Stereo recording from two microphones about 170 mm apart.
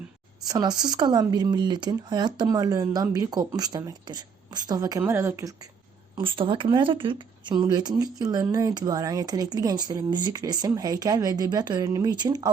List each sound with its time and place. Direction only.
0.4 s speech: 20° right (ahead or behind)
6.1 s speech: 30° right (ahead or behind)